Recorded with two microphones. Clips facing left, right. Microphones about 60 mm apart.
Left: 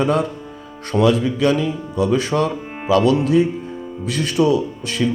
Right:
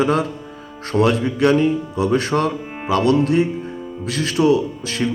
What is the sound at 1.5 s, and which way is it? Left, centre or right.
Speech, left.